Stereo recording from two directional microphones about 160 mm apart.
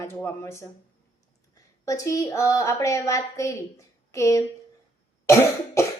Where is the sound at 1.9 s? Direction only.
20° left (ahead or behind).